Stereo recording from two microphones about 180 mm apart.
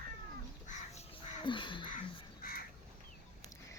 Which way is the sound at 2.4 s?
55° left (ahead or behind).